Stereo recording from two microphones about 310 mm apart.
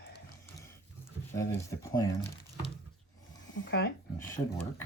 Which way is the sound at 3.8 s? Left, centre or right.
Left.